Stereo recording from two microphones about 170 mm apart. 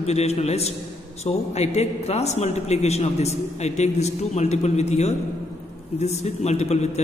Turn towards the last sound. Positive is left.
turn(degrees=40)  # may be behind; listen again after turning